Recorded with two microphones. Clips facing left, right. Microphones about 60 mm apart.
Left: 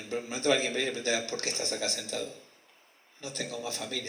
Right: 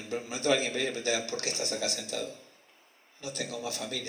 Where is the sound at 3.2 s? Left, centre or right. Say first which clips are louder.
Right 1 dB; left.